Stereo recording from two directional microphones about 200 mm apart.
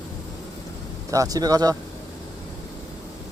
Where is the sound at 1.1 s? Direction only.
15° right (ahead or behind).